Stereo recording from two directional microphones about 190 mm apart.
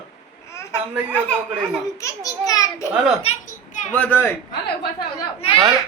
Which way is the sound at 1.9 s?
15° left (ahead or behind).